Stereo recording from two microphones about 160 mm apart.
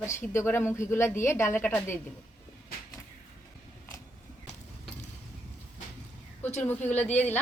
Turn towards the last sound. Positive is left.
turn(degrees=10)  # may be behind; listen again after turning